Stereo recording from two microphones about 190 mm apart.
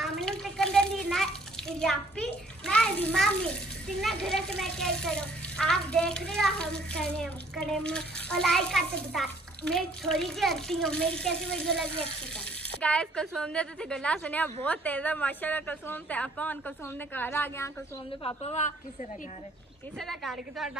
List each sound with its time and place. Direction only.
0.0 s a sound: 5° left (ahead or behind)
1.0 s a child's voice: centre (ahead or behind)
18.2 s a woman's voice: 35° left (ahead or behind)
20.0 s a child's voice: centre (ahead or behind)